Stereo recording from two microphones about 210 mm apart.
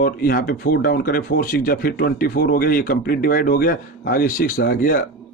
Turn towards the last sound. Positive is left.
turn(degrees=45)  # may be behind; listen again after turning